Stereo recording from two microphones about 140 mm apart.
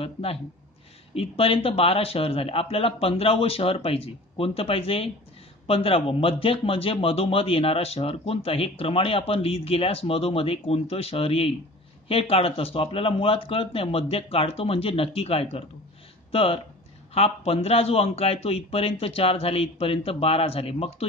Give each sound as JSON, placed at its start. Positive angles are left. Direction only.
{"t": 0.0, "sound": "a man's voice", "side_deg": 45}